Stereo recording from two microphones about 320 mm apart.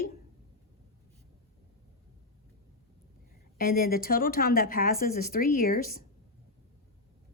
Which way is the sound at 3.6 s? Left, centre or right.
Left.